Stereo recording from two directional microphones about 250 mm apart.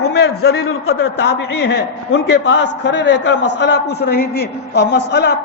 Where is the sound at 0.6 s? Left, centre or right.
Left.